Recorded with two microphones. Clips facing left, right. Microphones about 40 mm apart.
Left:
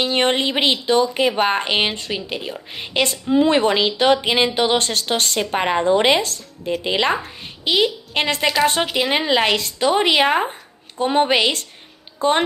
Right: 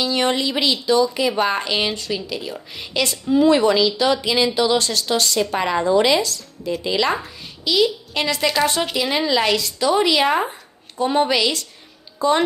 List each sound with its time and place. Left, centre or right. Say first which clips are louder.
0.0 s speech: left 1 dB; left
3.3 s a woman's voice: right 2 dB; left